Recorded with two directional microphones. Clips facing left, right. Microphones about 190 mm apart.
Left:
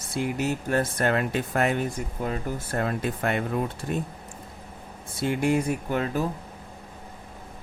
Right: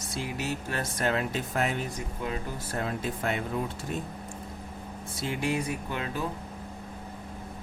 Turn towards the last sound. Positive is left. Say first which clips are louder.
# left 6 dB
turn(degrees=50)  # may be behind; listen again after turning